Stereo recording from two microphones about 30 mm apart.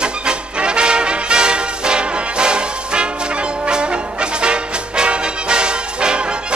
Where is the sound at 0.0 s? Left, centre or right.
Right.